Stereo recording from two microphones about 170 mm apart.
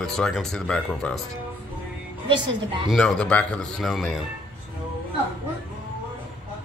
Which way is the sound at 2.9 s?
5° left (ahead or behind).